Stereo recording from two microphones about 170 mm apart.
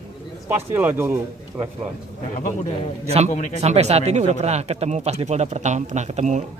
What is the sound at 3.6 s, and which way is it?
Speech, 40° right (ahead or behind).